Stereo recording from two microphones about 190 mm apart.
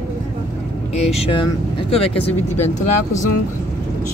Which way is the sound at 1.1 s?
30° left (ahead or behind).